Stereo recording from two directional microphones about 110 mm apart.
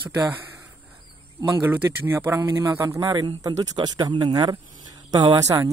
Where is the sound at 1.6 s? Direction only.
20° right (ahead or behind).